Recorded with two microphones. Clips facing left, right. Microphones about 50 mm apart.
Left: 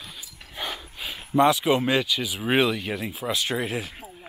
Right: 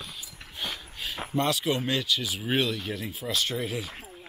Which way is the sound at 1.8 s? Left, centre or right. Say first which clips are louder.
Left 6 dB; centre.